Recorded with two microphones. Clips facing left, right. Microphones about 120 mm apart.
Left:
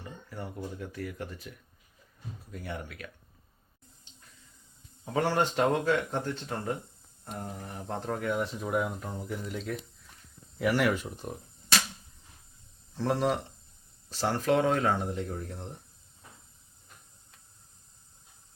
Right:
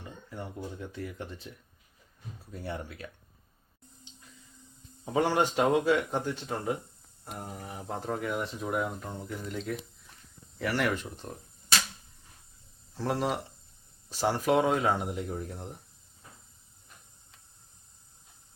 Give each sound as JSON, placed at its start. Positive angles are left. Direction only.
{"t": 0.3, "sound": "speech", "side_deg": -20}
{"t": 4.1, "sound": "a sound", "side_deg": -15}
{"t": 5.0, "sound": "speech", "side_deg": -15}
{"t": 12.9, "sound": "speech", "side_deg": -5}